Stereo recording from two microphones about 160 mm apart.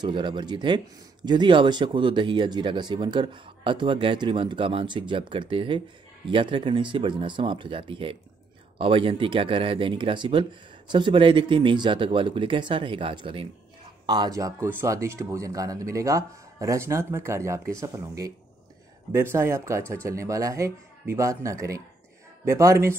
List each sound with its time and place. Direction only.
0.0 s a man's voice: 30° right (ahead or behind)